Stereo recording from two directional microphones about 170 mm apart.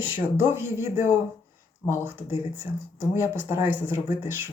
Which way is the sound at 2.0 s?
15° right (ahead or behind).